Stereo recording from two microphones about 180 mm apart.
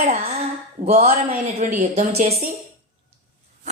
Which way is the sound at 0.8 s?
35° right (ahead or behind).